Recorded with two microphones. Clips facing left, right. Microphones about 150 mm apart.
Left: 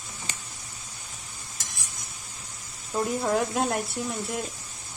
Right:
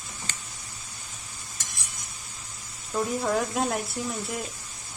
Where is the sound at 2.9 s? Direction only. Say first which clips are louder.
Left 1 dB; 5° left (ahead or behind).